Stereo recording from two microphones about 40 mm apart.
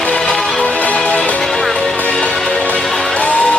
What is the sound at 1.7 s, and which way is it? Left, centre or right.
Music, centre.